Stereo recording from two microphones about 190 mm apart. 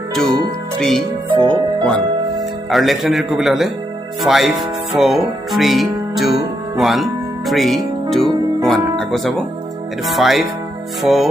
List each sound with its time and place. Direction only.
0.1 s music: centre (ahead or behind)
0.8 s speech: centre (ahead or behind)
1.3 s music: 25° right (ahead or behind)
2.6 s speech: centre (ahead or behind)